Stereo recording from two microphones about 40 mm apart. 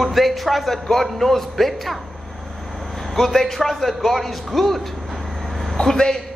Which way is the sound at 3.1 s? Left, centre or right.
Centre.